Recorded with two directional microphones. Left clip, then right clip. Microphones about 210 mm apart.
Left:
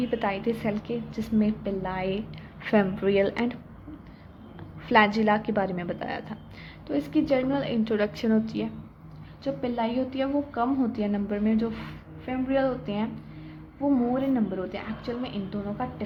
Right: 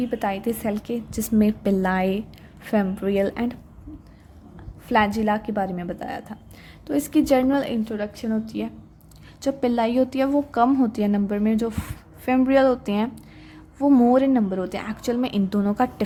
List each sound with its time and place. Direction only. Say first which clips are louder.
0.0 s a woman's voice: right 2 dB; 25° right (ahead or behind)
2.6 s a woman's voice: even; 20° right (ahead or behind)
4.9 s a woman's voice: even; 20° right (ahead or behind)
6.8 s a woman's voice: right 5 dB; 35° right (ahead or behind)
7.9 s a woman's voice: left 3 dB; 10° right (ahead or behind)
9.4 s a woman's voice: right 6 dB; 35° right (ahead or behind)